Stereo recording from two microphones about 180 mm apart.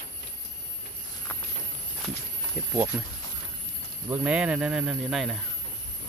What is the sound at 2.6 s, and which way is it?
Speech, 10° right (ahead or behind).